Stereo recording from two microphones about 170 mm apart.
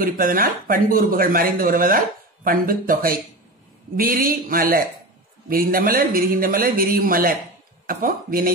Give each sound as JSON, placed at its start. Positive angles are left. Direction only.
{"t": 0.0, "sound": "speech", "side_deg": -55}